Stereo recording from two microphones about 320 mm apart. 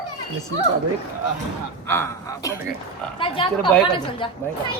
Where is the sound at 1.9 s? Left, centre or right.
Centre.